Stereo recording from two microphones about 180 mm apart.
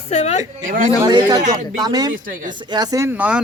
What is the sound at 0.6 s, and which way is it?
Speech, 50° right (ahead or behind).